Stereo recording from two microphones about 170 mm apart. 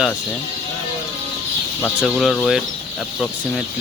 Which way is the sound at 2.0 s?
Centre (ahead or behind).